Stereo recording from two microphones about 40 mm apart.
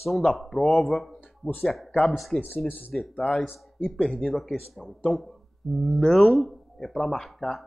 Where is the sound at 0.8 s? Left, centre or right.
Centre.